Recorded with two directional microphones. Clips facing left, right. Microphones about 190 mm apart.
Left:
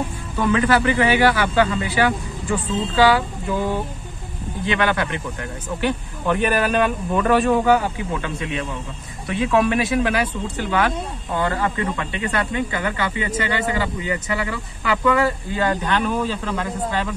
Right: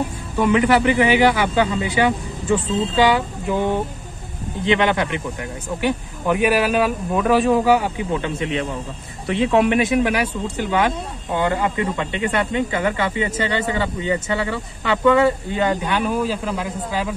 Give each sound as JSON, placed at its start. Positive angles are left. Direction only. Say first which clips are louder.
{"t": 0.4, "sound": "speech", "louder": "right 2 dB", "side_deg": -15}
{"t": 8.2, "sound": "speech", "louder": "right 3 dB", "side_deg": -25}